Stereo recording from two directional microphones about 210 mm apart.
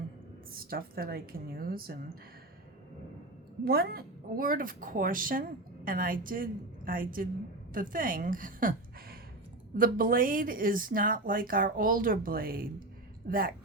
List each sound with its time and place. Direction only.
0.5 s a woman's voice: 45° right (ahead or behind)
3.6 s a woman's voice: 45° right (ahead or behind)